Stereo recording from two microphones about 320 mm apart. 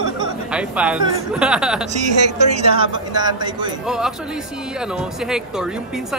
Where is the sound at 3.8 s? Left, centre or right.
Centre.